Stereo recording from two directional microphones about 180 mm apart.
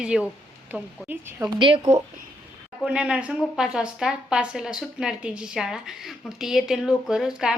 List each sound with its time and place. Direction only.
0.0 s a woman's voice: 5° right (ahead or behind)
1.5 s a woman's voice: 25° right (ahead or behind)
2.8 s a woman's voice: 5° right (ahead or behind)